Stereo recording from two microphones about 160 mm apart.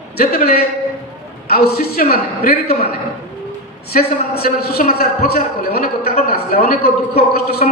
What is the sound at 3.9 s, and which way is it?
A man's voice, 75° left (ahead or behind).